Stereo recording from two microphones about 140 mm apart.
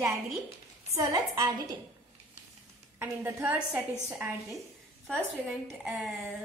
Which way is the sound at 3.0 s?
15° right (ahead or behind).